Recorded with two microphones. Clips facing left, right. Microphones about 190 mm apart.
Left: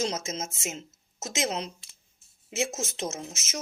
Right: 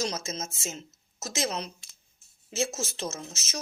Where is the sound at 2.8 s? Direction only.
25° left (ahead or behind).